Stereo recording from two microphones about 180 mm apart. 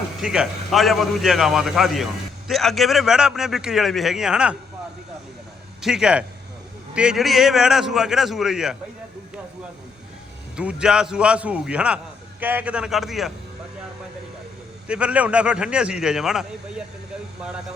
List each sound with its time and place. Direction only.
0.2 s a man's voice: 5° right (ahead or behind)
5.8 s a man's voice: 5° right (ahead or behind)
10.6 s a man's voice: 5° right (ahead or behind)
14.8 s a man's voice: 5° right (ahead or behind)